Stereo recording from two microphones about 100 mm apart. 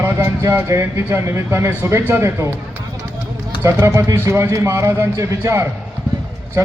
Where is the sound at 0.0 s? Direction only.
25° right (ahead or behind).